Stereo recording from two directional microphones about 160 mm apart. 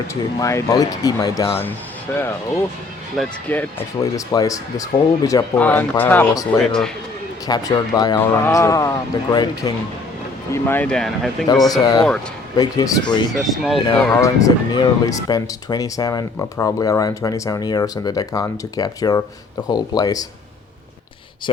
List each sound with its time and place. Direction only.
0.1 s speech: 20° left (ahead or behind)
3.5 s speech: 10° left (ahead or behind)
4.0 s speech: 20° left (ahead or behind)
5.5 s speech: 10° left (ahead or behind)
7.4 s speech: 25° left (ahead or behind)
10.5 s speech: 10° left (ahead or behind)
11.7 s speech: 25° left (ahead or behind)
13.3 s speech: centre (ahead or behind)
14.1 s speech: 20° left (ahead or behind)